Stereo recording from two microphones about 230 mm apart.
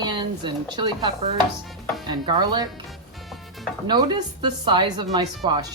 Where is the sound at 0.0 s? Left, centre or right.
Centre.